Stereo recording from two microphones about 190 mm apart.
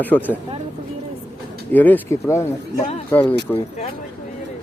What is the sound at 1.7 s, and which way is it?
Speech, 10° left (ahead or behind).